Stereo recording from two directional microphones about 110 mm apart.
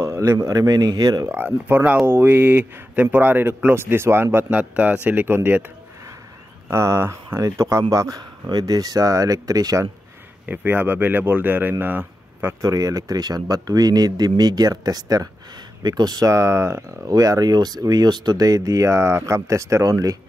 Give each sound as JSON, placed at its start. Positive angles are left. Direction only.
{"t": 0.0, "sound": "speech", "side_deg": -25}
{"t": 1.3, "sound": "a man's voice", "side_deg": -20}
{"t": 6.7, "sound": "a man's voice", "side_deg": -25}
{"t": 10.4, "sound": "speech", "side_deg": -15}
{"t": 12.6, "sound": "speech", "side_deg": -30}